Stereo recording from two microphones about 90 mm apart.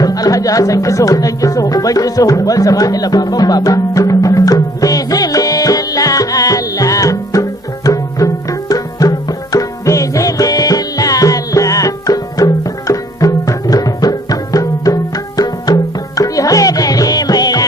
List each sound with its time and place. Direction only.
0.0 s music: 40° left (ahead or behind)